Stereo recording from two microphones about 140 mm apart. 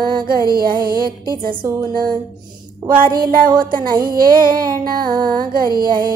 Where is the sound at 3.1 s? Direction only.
90° right.